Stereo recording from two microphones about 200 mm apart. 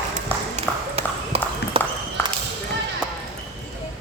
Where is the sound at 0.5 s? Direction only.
30° right (ahead or behind).